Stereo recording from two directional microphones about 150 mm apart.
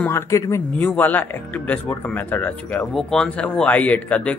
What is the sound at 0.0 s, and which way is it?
Speech, 20° left (ahead or behind).